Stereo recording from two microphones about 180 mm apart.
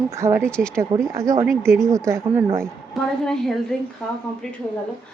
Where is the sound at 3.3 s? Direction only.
Centre (ahead or behind).